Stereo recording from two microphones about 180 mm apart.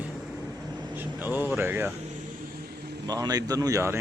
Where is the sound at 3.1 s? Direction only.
20° right (ahead or behind).